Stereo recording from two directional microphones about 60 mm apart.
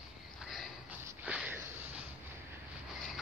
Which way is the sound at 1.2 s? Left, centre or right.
Right.